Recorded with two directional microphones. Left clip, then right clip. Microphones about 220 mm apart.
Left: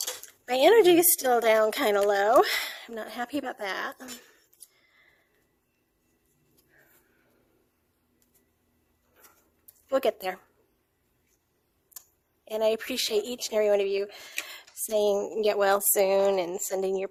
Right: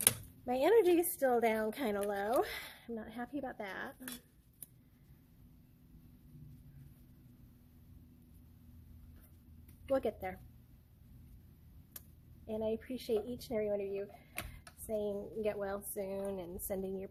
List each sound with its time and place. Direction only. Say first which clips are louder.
0.4 s speech: left 10 dB; 45° left (ahead or behind)
9.9 s speech: left 9 dB; 40° left (ahead or behind)
12.5 s a woman's voice: left 13 dB; 45° left (ahead or behind)